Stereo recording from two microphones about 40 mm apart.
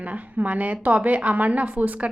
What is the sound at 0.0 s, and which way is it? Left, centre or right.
A woman's voice, right.